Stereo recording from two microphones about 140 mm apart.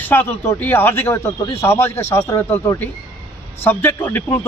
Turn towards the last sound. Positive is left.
turn(degrees=15)  # may be behind; listen again after turning